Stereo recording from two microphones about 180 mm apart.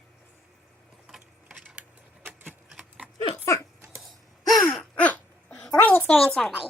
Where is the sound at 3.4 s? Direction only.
15° left (ahead or behind).